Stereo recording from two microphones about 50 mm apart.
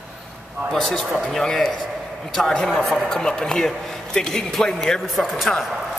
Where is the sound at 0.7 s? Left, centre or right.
Centre.